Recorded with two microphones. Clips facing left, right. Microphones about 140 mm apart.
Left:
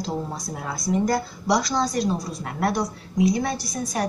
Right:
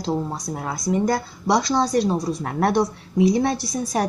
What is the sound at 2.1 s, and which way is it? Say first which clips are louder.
Speech: right 4 dB; 30° right (ahead or behind).